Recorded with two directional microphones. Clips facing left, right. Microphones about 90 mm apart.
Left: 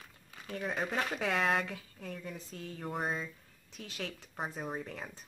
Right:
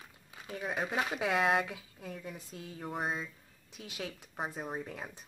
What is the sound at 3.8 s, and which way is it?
Speech, 15° right (ahead or behind).